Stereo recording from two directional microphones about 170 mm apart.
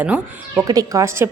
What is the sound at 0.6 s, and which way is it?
Speech, 20° right (ahead or behind).